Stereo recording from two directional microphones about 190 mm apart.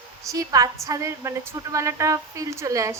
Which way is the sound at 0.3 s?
20° right (ahead or behind).